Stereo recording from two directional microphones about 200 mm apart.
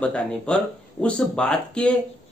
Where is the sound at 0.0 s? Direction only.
5° left (ahead or behind).